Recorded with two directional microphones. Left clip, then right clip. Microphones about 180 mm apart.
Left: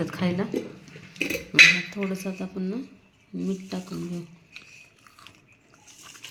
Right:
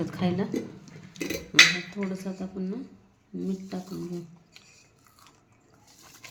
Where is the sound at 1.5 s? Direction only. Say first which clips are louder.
Left 3 dB; 25° left (ahead or behind).